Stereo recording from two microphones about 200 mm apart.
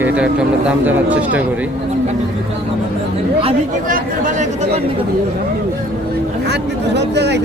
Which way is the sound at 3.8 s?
40° right (ahead or behind).